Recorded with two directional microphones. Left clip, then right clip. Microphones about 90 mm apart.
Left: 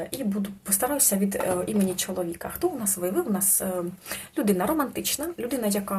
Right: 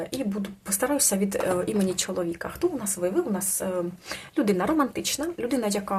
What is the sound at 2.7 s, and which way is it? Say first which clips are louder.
Speech: right 1 dB; 20° right (ahead or behind).